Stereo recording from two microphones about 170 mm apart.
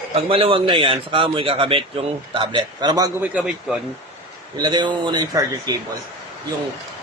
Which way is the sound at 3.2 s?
5° right (ahead or behind).